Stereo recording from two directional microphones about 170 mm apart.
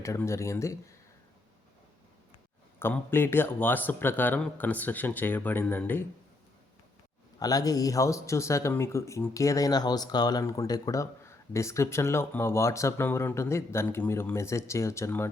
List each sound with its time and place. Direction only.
0.0 s speech: 15° left (ahead or behind)
2.7 s speech: 15° left (ahead or behind)
7.3 s speech: 20° left (ahead or behind)